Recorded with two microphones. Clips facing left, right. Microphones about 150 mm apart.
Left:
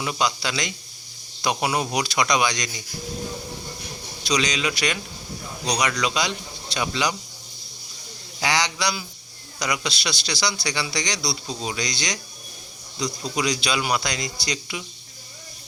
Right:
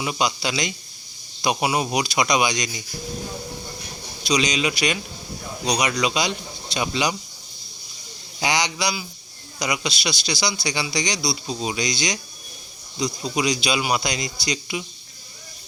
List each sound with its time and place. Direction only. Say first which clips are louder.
0.0 s speech: right 1 dB; 15° right (ahead or behind)
4.2 s speech: right 2 dB; 15° right (ahead or behind)
8.4 s speech: right 1 dB; 15° right (ahead or behind)